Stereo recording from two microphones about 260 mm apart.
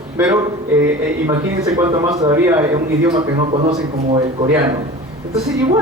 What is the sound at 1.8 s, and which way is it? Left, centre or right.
A man's voice, centre.